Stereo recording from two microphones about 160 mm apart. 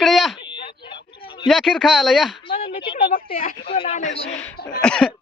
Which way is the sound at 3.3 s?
40° left (ahead or behind).